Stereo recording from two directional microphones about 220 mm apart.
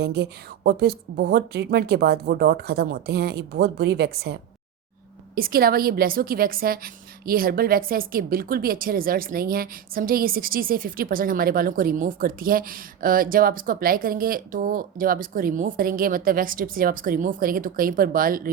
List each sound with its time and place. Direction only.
0.0 s a woman's voice: 45° right (ahead or behind)